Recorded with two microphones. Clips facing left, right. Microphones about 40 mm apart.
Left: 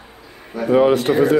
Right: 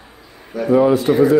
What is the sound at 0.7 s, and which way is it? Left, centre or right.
Speech, left.